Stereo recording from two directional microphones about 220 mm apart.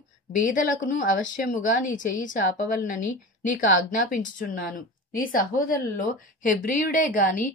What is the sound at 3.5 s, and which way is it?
Speech, 35° left (ahead or behind).